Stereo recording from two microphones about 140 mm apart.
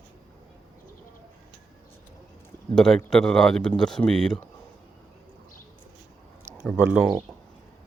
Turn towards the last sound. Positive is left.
turn(degrees=-10)  # may be behind; listen again after turning